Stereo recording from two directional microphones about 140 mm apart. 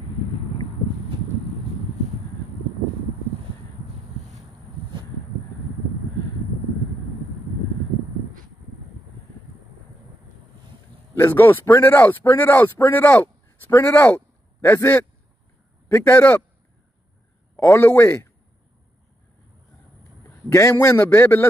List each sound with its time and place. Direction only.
11.1 s a man's voice: 15° left (ahead or behind)
17.6 s a man's voice: 20° left (ahead or behind)
20.2 s a man's voice: 20° left (ahead or behind)